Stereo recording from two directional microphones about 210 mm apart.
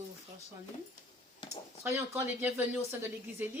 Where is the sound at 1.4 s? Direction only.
25° left (ahead or behind).